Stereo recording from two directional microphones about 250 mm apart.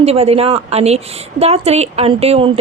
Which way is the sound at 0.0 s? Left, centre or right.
Right.